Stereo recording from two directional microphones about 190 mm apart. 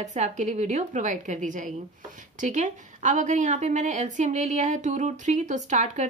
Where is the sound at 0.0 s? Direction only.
40° right (ahead or behind).